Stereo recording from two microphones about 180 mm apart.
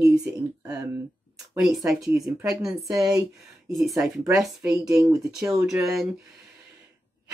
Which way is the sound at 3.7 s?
Centre (ahead or behind).